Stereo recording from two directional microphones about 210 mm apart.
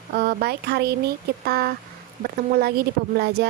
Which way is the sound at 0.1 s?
45° right (ahead or behind).